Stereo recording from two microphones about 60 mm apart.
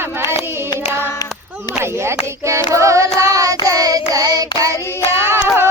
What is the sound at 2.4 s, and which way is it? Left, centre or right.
Child singing, right.